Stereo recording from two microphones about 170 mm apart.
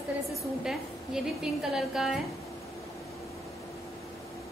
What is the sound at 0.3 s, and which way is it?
A woman's voice, centre (ahead or behind).